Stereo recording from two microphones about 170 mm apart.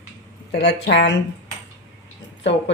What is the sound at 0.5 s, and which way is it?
Speech, 75° left (ahead or behind).